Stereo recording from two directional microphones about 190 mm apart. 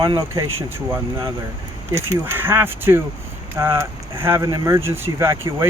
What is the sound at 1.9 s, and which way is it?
Speech, 15° right (ahead or behind).